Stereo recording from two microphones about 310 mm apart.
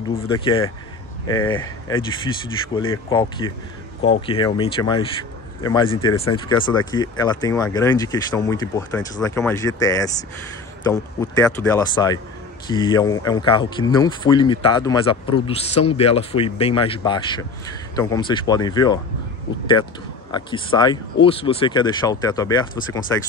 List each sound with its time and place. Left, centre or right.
0.3 s speech: centre
20.2 s speech: centre